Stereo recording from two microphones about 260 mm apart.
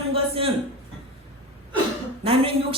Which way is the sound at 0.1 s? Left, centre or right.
Right.